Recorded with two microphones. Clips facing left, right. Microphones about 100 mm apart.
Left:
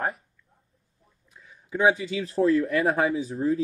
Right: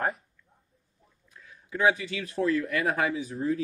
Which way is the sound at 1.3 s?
15° left (ahead or behind).